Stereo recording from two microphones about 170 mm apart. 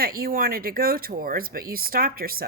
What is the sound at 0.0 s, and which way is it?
Speech, 60° right (ahead or behind).